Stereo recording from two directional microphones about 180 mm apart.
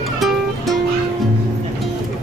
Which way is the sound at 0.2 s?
Centre (ahead or behind).